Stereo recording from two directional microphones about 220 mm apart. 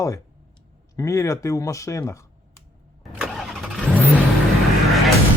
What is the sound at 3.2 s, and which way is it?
Vehicle, centre (ahead or behind).